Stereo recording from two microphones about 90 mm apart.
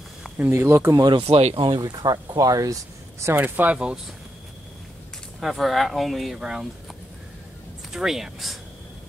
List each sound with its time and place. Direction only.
0.4 s speech: 25° right (ahead or behind)
1.1 s speech: 90° right
1.7 s speech: 50° right (ahead or behind)
3.3 s speech: 20° right (ahead or behind)
5.4 s speech: centre (ahead or behind)
7.9 s speech: 5° right (ahead or behind)